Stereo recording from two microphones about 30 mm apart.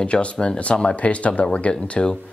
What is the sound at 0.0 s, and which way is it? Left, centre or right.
Speech, left.